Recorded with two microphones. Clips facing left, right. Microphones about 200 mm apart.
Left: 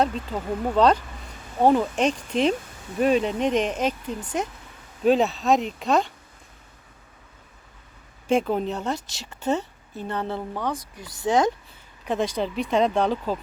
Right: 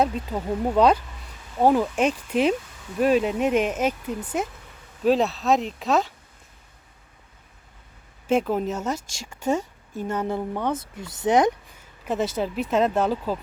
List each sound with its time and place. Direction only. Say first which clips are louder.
0.0 s speech: right 1 dB; 10° right (ahead or behind)
8.3 s a woman's voice: even; 5° right (ahead or behind); by 11.5 s 20° right (ahead or behind)
12.0 s speech: even; 5° right (ahead or behind)